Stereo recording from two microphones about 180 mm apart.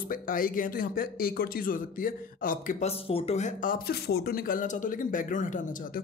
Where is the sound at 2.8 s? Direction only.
35° left (ahead or behind).